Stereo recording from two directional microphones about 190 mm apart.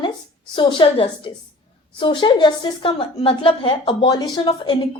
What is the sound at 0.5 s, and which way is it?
A woman's voice, 25° left (ahead or behind).